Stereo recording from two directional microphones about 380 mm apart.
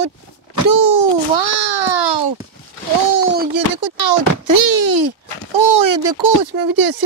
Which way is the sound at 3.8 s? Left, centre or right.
Right.